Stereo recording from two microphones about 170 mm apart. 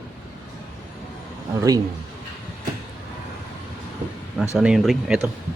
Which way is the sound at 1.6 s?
20° right (ahead or behind).